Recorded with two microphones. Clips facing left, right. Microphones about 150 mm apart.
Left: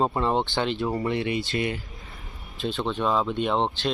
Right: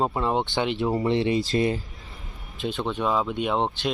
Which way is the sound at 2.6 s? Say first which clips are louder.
Even; 15° right (ahead or behind).